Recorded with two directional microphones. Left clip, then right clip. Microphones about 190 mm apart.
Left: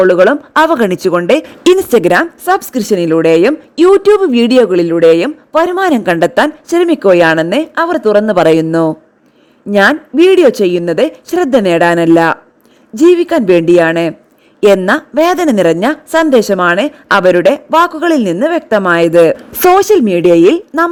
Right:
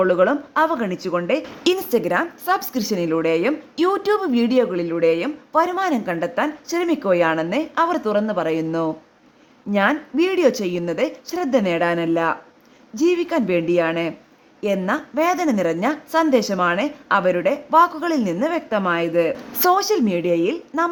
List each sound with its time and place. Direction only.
0.0 s a woman's voice: 45° left (ahead or behind)
13.0 s a woman's voice: 40° left (ahead or behind)